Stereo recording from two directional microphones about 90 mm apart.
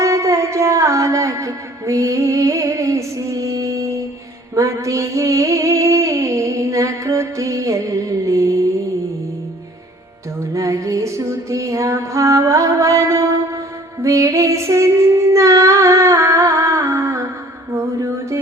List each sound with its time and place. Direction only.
0.0 s music: 35° right (ahead or behind)
4.5 s a sound: 40° right (ahead or behind)
10.5 s music: 40° right (ahead or behind)
14.0 s female singing: 35° right (ahead or behind)